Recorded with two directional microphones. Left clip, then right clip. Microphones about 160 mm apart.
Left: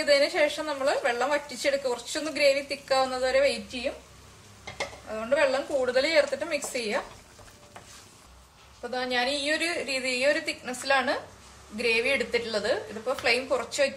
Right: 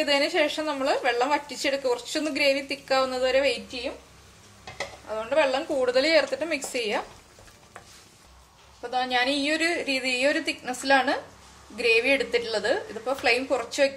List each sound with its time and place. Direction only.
0.0 s a woman's voice: 45° right (ahead or behind)
5.1 s a woman's voice: 45° right (ahead or behind)
9.1 s a woman's voice: 45° right (ahead or behind)